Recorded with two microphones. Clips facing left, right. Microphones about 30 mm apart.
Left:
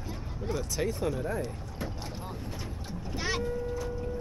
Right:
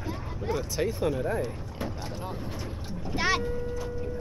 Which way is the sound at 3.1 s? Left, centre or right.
Right.